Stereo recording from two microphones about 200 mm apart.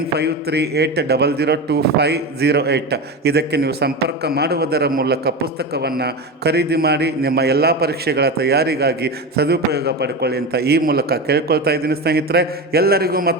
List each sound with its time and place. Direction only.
0.2 s a man's voice: 55° right (ahead or behind)